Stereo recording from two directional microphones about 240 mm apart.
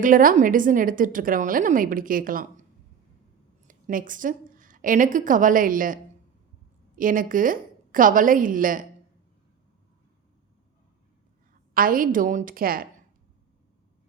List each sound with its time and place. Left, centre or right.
0.0 s a woman's voice: right
3.7 s a woman's voice: right
11.7 s a woman's voice: right